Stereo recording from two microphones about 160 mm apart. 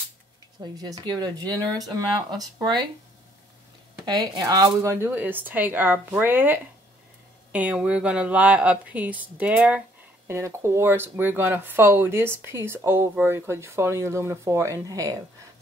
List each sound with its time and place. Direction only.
0.6 s speech: 25° right (ahead or behind)
4.0 s speech: 25° right (ahead or behind)